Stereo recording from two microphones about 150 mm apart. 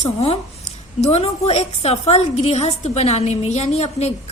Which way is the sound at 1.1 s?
45° left (ahead or behind).